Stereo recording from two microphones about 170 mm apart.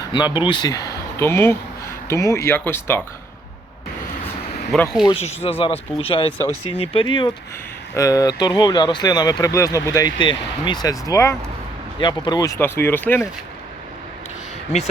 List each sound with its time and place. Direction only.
0.1 s speech: 25° left (ahead or behind)
4.7 s speech: centre (ahead or behind)
5.0 s speech: 35° left (ahead or behind); by 13.2 s 10° left (ahead or behind)